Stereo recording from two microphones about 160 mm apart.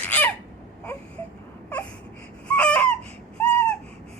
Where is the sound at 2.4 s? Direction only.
10° left (ahead or behind).